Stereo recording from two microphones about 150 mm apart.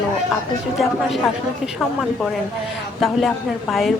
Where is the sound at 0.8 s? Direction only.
Centre (ahead or behind).